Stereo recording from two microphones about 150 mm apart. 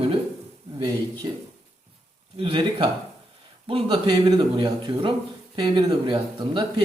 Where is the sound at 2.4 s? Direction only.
35° right (ahead or behind).